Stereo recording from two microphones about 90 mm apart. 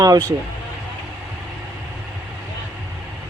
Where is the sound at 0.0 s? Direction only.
40° right (ahead or behind).